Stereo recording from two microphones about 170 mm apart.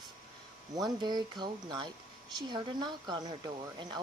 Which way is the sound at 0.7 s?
25° right (ahead or behind).